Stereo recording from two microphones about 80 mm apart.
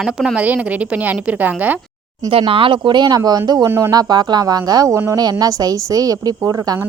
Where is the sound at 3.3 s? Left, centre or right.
Right.